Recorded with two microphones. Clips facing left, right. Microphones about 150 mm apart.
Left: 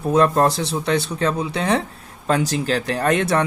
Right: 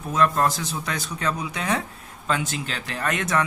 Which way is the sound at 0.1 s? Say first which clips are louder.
Left 5 dB; 35° left (ahead or behind).